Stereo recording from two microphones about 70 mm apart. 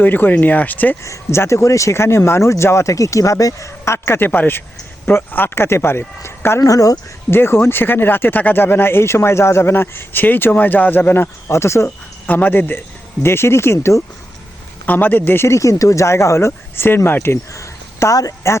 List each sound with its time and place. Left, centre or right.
0.0 s speech: left
1.0 s speech: left
6.7 s speech: left
7.3 s speech: left
12.2 s speech: left
13.2 s speech: left
14.8 s speech: left
15.4 s speech: left
17.5 s a woman's voice: left